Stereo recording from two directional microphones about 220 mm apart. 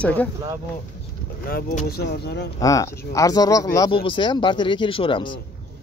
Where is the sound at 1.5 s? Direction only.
40° left (ahead or behind).